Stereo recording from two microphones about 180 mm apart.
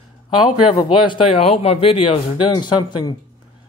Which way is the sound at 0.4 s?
25° left (ahead or behind).